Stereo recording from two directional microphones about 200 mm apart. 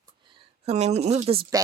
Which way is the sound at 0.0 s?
30° right (ahead or behind).